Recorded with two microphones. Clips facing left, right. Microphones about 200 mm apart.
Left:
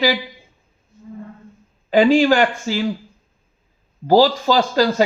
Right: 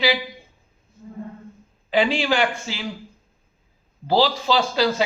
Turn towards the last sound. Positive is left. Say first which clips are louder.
# left 4 dB
turn(degrees=45)  # may be behind; listen again after turning